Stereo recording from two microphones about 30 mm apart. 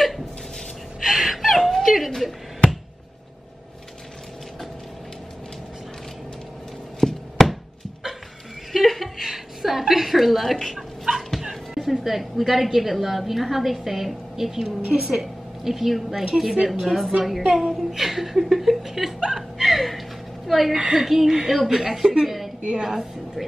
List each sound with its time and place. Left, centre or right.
1.0 s gasp: centre
1.8 s cat: centre
7.0 s a sound: centre
8.8 s chuckle: centre
9.2 s a sound: centre
11.1 s dog: right
11.9 s a woman's voice: centre
19.3 s chuckle: centre
20.4 s a woman's voice: centre
20.7 s a woman's voice: centre